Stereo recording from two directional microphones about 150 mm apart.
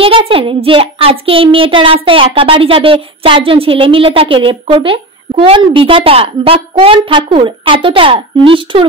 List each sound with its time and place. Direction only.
0.0 s a woman's voice: 35° right (ahead or behind)